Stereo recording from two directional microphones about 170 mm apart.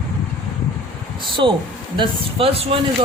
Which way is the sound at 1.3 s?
30° right (ahead or behind).